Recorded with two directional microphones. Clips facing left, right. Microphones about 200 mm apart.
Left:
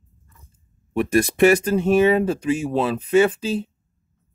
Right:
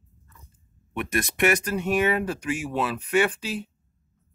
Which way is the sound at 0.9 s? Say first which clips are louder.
Left 9 dB; 30° left (ahead or behind).